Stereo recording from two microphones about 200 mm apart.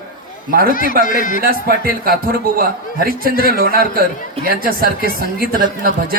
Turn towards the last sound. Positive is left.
turn(degrees=-45)  # may be behind; listen again after turning